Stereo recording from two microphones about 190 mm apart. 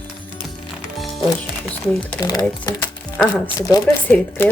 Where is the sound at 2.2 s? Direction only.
20° left (ahead or behind).